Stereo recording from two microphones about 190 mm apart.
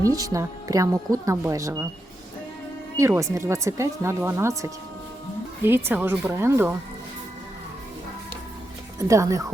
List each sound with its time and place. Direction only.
0.0 s speech: 20° right (ahead or behind)
3.0 s speech: 15° right (ahead or behind)
9.0 s speech: 15° right (ahead or behind)